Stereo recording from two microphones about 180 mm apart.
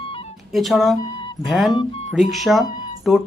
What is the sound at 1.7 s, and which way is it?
Speech, 25° left (ahead or behind).